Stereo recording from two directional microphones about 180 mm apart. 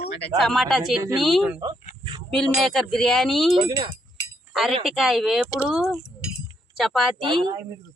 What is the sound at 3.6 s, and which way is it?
Speech, 25° right (ahead or behind).